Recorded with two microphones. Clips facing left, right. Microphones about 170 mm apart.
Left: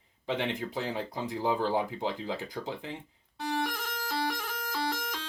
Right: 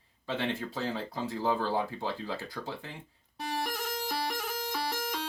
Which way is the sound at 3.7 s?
10° right (ahead or behind).